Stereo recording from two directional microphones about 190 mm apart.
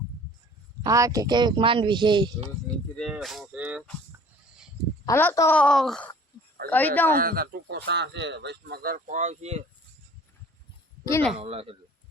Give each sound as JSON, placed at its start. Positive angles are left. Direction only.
{"t": 0.8, "sound": "speech", "side_deg": -15}
{"t": 2.9, "sound": "speech", "side_deg": 0}
{"t": 5.0, "sound": "speech", "side_deg": 15}
{"t": 5.5, "sound": "speech", "side_deg": 5}
{"t": 7.2, "sound": "speech", "side_deg": -50}
{"t": 11.0, "sound": "speech", "side_deg": 15}
{"t": 11.3, "sound": "speech", "side_deg": -30}